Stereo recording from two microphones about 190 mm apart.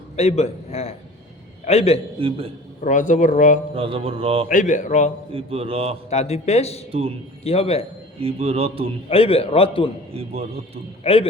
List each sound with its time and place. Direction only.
0.2 s a man's voice: 35° left (ahead or behind)
2.1 s music: 30° right (ahead or behind)
2.8 s speech: 40° left (ahead or behind)
3.8 s music: 30° right (ahead or behind)
4.4 s speech: 40° left (ahead or behind)
5.3 s music: 30° right (ahead or behind)
6.1 s speech: 35° left (ahead or behind)
8.2 s speech: 30° right (ahead or behind)
9.0 s a man's voice: 30° left (ahead or behind)
10.1 s speech: 30° right (ahead or behind)
11.0 s speech: 30° left (ahead or behind)